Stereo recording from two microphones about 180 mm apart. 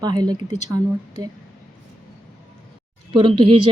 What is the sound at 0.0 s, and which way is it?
A woman's voice, 20° right (ahead or behind).